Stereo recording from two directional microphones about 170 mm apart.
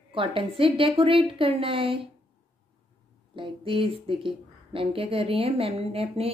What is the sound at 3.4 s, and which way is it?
A woman's voice, 30° right (ahead or behind).